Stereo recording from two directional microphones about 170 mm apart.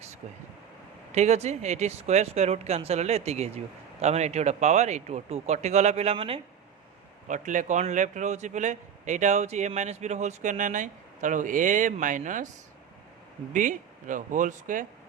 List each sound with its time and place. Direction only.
1.1 s speech: 40° right (ahead or behind)
7.3 s a man's voice: 45° right (ahead or behind)
13.5 s a man's voice: 50° right (ahead or behind)